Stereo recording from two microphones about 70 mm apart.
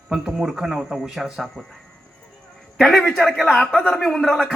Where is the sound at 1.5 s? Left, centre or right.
Centre.